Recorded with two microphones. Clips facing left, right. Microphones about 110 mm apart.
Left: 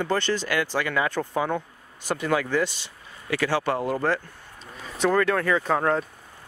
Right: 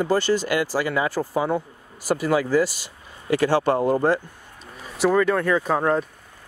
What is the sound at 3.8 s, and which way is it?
Speech, 25° right (ahead or behind).